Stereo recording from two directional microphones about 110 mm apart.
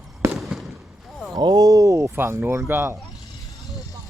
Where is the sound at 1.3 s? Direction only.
35° right (ahead or behind); by 3.0 s 20° right (ahead or behind).